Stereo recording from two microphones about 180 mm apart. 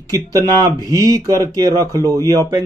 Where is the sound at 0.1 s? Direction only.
20° right (ahead or behind).